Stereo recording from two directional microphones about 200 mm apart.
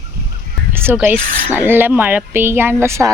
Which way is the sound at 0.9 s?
10° right (ahead or behind).